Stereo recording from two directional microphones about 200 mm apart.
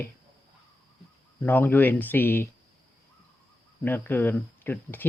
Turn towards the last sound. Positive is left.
turn(degrees=10)  # may be behind; listen again after turning